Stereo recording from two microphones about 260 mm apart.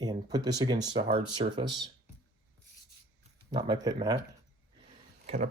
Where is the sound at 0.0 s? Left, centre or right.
Centre.